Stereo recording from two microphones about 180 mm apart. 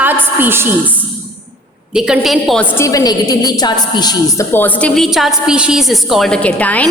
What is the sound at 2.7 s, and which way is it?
A woman's voice, 15° left (ahead or behind).